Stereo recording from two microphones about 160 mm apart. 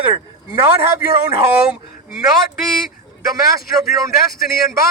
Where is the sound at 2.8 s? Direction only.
65° left (ahead or behind).